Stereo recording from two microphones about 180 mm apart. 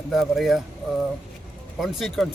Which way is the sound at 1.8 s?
Centre (ahead or behind).